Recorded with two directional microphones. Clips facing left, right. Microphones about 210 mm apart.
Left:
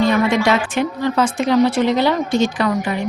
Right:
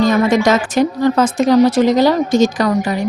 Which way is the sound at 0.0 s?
40° right (ahead or behind).